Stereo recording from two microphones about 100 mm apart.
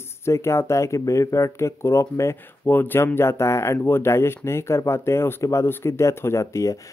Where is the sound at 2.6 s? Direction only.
20° left (ahead or behind).